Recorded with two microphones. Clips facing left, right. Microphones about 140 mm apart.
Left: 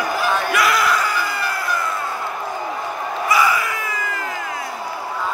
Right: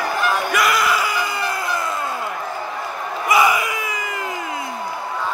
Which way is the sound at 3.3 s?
20° right (ahead or behind).